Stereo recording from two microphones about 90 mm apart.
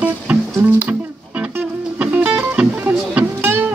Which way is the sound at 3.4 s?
25° right (ahead or behind).